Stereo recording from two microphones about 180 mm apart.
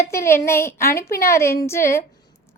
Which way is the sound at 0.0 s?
15° left (ahead or behind).